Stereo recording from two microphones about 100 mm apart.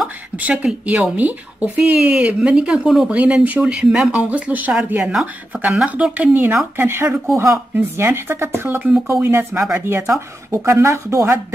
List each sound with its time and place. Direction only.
0.4 s speech: 15° right (ahead or behind)
6.3 s speech: 20° right (ahead or behind)
7.3 s a woman's voice: 35° right (ahead or behind)